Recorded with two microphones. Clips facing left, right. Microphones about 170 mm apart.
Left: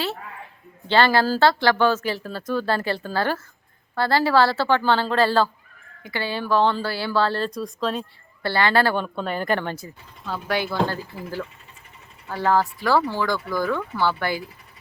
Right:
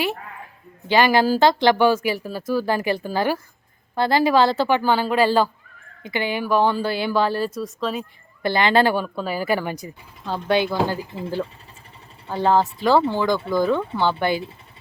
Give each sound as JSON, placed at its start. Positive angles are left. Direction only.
{"t": 0.9, "sound": "speech", "side_deg": -15}
{"t": 8.4, "sound": "speech", "side_deg": -20}
{"t": 9.0, "sound": "speech", "side_deg": -5}